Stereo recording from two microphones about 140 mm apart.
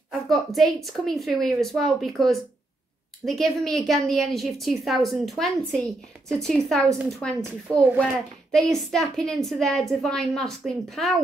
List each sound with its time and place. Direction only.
0.1 s a sound: centre (ahead or behind)
0.8 s a woman's voice: centre (ahead or behind)
7.7 s a child's voice: 20° right (ahead or behind)
8.0 s a woman's voice: 5° left (ahead or behind)